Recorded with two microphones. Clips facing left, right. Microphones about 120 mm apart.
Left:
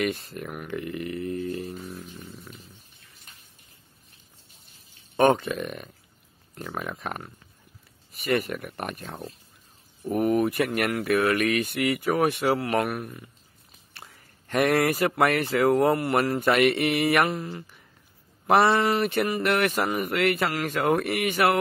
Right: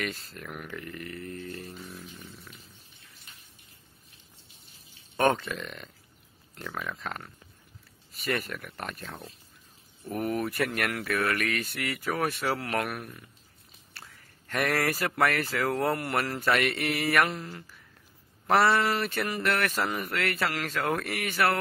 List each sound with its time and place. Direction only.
0.0 s speech: 20° left (ahead or behind)
0.7 s a sound: 20° left (ahead or behind)
2.2 s purr: 15° left (ahead or behind)
5.1 s speech: 15° left (ahead or behind)
10.0 s speech: 15° left (ahead or behind)
14.5 s speech: 20° left (ahead or behind)